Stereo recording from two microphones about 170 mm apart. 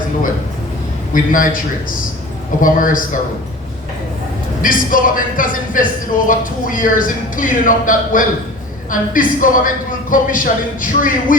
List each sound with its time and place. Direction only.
1.1 s speech: 50° left (ahead or behind)
2.6 s speech: 55° left (ahead or behind)
4.6 s speech: 55° left (ahead or behind)